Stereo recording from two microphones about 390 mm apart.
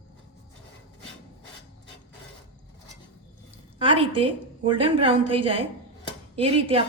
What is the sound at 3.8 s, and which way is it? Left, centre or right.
A woman's voice, centre.